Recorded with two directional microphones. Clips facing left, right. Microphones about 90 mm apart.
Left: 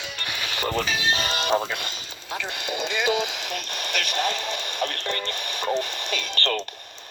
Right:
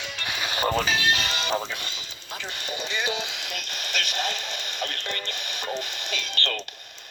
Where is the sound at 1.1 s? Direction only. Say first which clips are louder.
Left 3 dB; 45° left (ahead or behind).